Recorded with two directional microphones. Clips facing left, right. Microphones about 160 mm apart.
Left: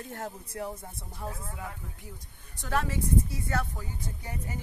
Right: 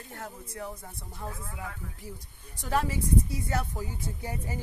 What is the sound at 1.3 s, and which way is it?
Speech, 30° left (ahead or behind).